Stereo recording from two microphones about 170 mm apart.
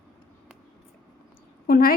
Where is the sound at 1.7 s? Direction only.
60° left (ahead or behind).